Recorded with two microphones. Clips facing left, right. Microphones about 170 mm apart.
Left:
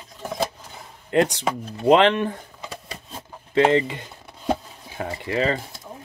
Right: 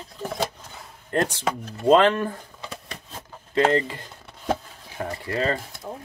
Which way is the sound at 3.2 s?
20° left (ahead or behind).